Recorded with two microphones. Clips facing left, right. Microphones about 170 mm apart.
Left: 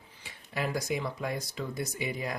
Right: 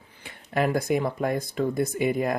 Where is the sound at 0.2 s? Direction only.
55° right (ahead or behind).